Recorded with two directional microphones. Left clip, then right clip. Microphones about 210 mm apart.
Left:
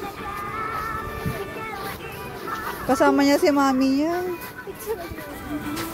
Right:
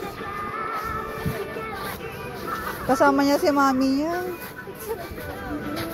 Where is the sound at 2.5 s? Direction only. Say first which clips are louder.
Even; 40° left (ahead or behind).